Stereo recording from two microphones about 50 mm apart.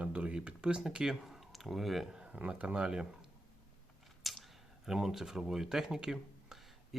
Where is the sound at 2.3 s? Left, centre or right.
Right.